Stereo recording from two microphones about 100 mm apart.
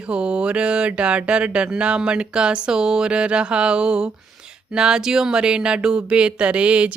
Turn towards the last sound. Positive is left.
turn(degrees=-10)  # may be behind; listen again after turning